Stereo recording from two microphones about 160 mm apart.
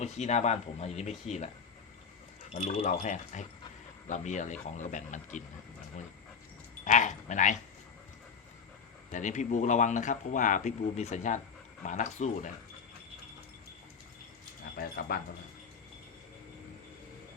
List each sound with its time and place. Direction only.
0.0 s speech: 45° left (ahead or behind)
2.5 s speech: 40° left (ahead or behind)
6.8 s speech: 50° left (ahead or behind)
9.1 s speech: 50° left (ahead or behind)
14.8 s speech: 70° left (ahead or behind)